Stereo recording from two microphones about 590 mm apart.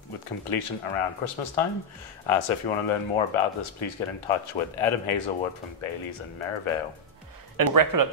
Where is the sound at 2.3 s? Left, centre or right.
Left.